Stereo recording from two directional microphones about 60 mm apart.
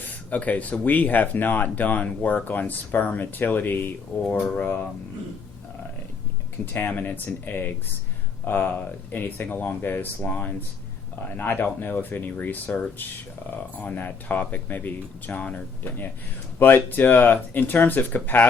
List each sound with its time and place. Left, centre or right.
0.3 s speech: left
6.7 s speech: left